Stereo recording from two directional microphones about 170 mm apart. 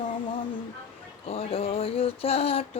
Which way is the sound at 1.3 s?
35° left (ahead or behind).